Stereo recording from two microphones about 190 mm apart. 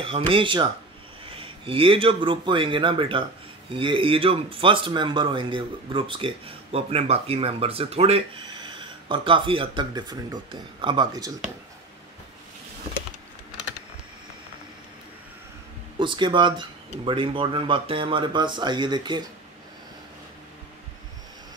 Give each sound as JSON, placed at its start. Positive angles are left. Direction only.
{"t": 0.3, "sound": "speech", "side_deg": -25}
{"t": 16.0, "sound": "speech", "side_deg": -25}